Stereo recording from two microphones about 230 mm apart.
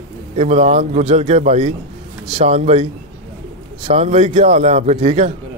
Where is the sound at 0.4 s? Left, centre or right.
Right.